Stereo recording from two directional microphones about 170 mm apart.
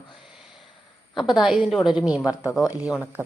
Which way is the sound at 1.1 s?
Centre (ahead or behind).